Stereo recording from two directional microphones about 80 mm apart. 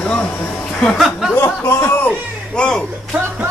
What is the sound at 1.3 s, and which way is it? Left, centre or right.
Speech, left.